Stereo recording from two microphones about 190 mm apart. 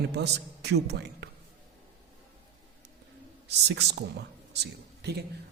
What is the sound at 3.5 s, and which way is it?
Speech, 65° right (ahead or behind).